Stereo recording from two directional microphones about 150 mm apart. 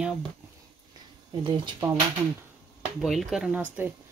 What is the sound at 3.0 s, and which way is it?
Speech, centre (ahead or behind).